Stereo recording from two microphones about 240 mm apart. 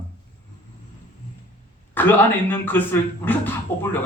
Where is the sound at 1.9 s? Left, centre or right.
Centre.